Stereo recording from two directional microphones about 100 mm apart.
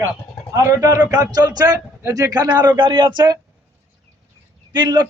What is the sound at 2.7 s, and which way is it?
Speech, 55° right (ahead or behind).